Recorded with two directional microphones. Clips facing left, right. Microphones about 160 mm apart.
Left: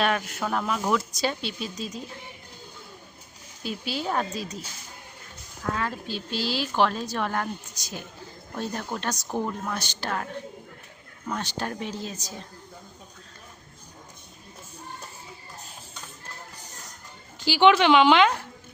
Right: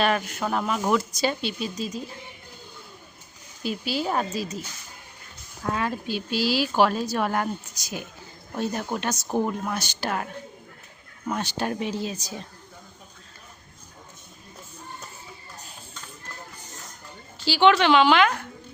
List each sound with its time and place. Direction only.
0.0 s speech: centre (ahead or behind)
3.6 s speech: 5° right (ahead or behind)
5.6 s speech: 15° right (ahead or behind)
11.3 s speech: 15° right (ahead or behind)
17.4 s a woman's voice: 15° left (ahead or behind)